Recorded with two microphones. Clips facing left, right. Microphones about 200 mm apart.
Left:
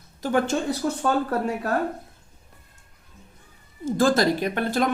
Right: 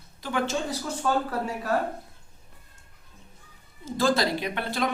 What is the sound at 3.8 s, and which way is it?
A woman's voice, 50° left (ahead or behind).